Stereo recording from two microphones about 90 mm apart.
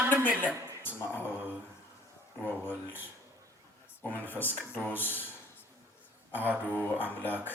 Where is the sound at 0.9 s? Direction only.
25° left (ahead or behind).